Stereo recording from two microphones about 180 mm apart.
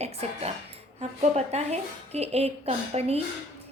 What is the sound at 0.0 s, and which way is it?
A woman's voice, 35° right (ahead or behind).